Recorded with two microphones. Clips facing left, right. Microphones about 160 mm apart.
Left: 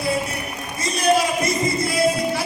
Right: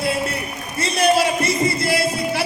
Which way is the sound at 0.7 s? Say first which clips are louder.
Right 2 dB; 70° right (ahead or behind).